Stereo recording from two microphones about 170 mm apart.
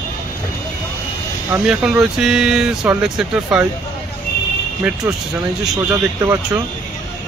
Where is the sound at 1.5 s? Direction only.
5° right (ahead or behind).